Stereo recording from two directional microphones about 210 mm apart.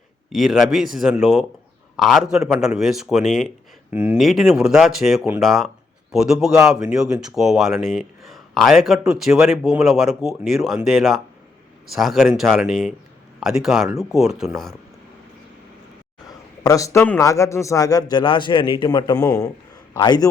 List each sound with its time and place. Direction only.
0.3 s speech: centre (ahead or behind)
16.6 s a man's voice: 15° left (ahead or behind)